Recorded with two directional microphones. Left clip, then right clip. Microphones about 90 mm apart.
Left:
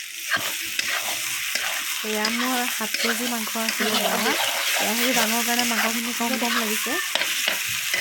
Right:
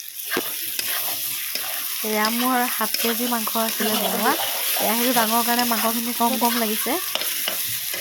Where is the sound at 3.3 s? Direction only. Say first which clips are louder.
Right 2 dB; 30° right (ahead or behind).